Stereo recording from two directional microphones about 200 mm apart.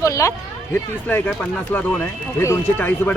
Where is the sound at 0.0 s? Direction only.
15° left (ahead or behind).